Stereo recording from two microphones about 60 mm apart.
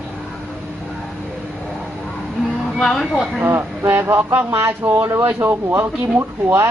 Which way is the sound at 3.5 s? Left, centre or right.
Right.